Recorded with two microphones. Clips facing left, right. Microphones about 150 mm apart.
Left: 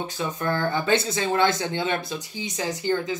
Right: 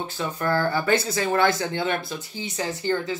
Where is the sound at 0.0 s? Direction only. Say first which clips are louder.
Even; 20° left (ahead or behind).